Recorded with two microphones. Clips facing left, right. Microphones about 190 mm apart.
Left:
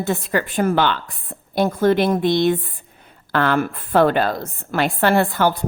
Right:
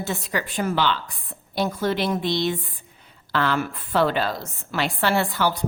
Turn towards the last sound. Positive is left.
turn(degrees=55)  # may be behind; listen again after turning